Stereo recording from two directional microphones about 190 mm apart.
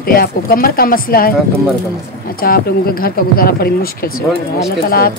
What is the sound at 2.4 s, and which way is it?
A woman's voice, 50° left (ahead or behind).